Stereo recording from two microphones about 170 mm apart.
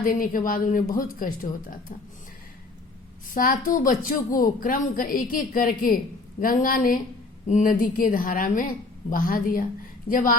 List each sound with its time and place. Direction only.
0.0 s speech: 55° left (ahead or behind)
3.3 s a woman's voice: 55° left (ahead or behind)